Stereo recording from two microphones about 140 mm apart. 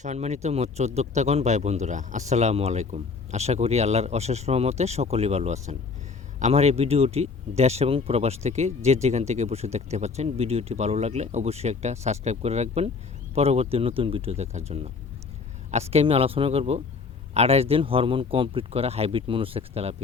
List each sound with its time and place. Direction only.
0.0 s speech: 55° right (ahead or behind)